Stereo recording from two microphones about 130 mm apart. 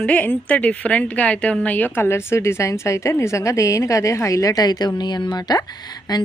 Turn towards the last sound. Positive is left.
turn(degrees=30)  # may be behind; listen again after turning